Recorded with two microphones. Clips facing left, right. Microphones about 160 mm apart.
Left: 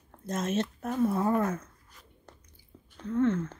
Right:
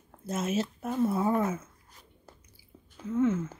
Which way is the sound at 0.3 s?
5° right (ahead or behind).